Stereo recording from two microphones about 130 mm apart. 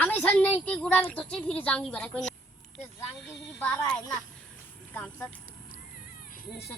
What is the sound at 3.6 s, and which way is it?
Speech, 10° left (ahead or behind).